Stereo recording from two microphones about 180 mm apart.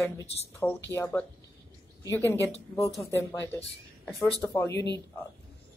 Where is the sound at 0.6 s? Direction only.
10° left (ahead or behind).